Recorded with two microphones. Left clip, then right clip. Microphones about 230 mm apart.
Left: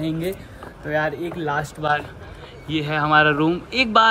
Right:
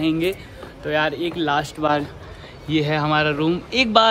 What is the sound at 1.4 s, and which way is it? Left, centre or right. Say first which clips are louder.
Speech: right 3 dB; centre.